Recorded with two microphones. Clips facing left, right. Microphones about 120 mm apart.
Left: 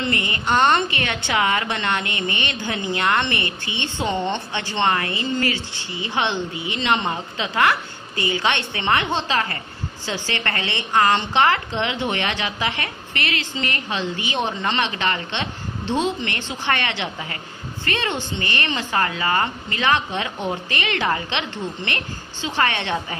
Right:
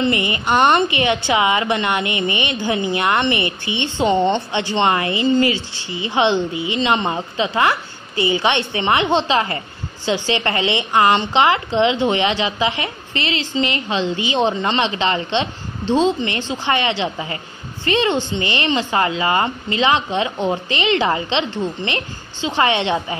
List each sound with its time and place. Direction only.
0.0 s a woman's voice: 15° right (ahead or behind)
13.3 s a woman's voice: 55° left (ahead or behind)
13.7 s a woman's voice: 20° right (ahead or behind)